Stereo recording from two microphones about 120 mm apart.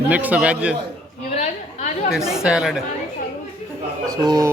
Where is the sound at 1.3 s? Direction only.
70° left (ahead or behind).